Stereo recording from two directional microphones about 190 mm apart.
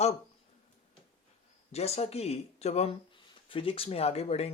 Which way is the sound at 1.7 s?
35° left (ahead or behind).